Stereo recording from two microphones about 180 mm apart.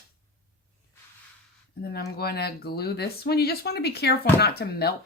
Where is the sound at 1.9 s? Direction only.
60° left (ahead or behind).